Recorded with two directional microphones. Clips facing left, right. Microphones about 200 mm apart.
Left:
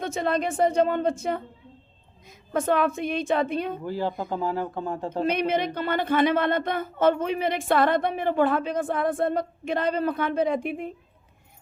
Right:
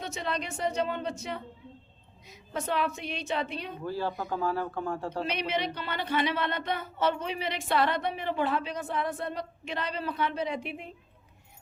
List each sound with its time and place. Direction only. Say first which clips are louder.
0.0 s a woman's voice: left 8 dB; 50° left (ahead or behind)
3.8 s speech: left 4 dB; 15° left (ahead or behind)
5.2 s speech: left 9 dB; 50° left (ahead or behind)